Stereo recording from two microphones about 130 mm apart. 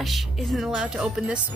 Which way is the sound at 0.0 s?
Centre (ahead or behind).